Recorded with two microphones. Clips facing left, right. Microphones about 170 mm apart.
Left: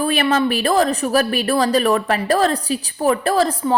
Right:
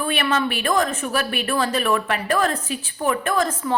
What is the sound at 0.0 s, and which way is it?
A woman's voice, 35° left (ahead or behind).